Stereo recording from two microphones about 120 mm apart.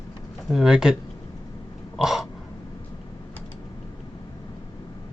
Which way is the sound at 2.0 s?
5° right (ahead or behind).